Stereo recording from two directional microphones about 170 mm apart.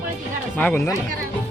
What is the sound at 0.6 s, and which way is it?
Speech, 10° left (ahead or behind).